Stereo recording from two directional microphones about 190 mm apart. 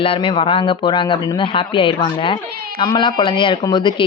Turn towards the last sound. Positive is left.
turn(degrees=25)  # may be behind; listen again after turning